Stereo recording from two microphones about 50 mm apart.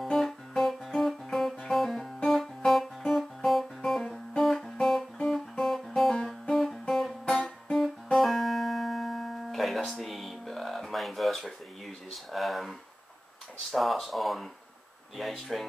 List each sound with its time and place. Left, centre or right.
0.0 s music: centre
4.4 s guitar: centre
6.5 s music: centre
7.3 s music: left
7.7 s music: centre
13.7 s speech: centre